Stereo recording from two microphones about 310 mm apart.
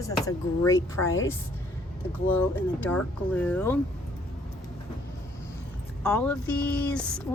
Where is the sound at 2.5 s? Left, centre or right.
Centre.